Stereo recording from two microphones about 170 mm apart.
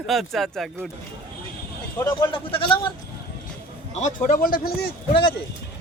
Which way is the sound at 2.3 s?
30° left (ahead or behind).